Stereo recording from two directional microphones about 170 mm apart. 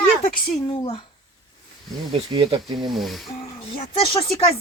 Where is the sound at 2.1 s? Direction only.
30° right (ahead or behind).